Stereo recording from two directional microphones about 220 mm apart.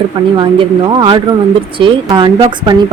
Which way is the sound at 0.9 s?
25° right (ahead or behind).